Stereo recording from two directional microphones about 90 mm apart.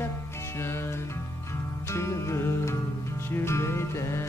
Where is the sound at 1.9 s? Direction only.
30° left (ahead or behind).